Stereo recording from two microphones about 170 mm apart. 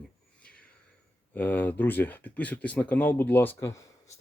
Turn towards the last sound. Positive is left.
turn(degrees=15)  # may be behind; listen again after turning